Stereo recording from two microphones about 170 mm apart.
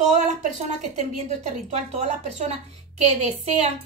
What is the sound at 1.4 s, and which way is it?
A woman's voice, 40° right (ahead or behind).